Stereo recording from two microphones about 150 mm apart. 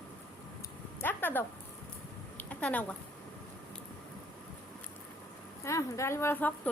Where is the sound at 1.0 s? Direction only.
15° left (ahead or behind).